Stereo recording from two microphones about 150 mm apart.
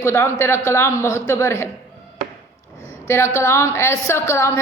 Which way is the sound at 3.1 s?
15° left (ahead or behind).